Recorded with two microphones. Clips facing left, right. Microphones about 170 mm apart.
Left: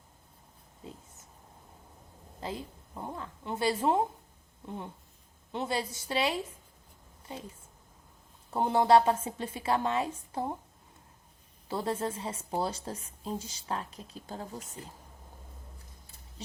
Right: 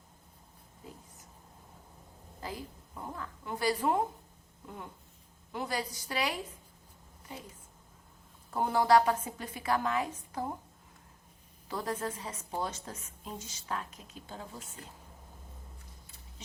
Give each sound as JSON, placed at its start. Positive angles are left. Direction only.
{"t": 0.8, "sound": "oink", "side_deg": 25}
{"t": 2.4, "sound": "a woman's voice", "side_deg": 25}
{"t": 8.4, "sound": "a woman's voice", "side_deg": 25}
{"t": 11.7, "sound": "speech", "side_deg": 25}